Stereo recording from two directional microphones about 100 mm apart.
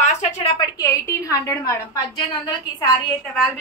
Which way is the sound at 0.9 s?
30° left (ahead or behind).